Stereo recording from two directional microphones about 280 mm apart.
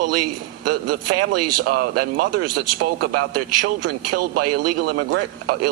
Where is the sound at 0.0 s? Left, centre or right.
Right.